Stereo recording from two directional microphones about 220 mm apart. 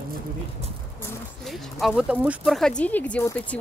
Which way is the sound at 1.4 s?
Centre (ahead or behind).